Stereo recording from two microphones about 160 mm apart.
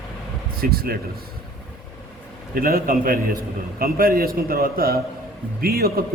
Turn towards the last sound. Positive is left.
turn(degrees=-70)  # may be behind; listen again after turning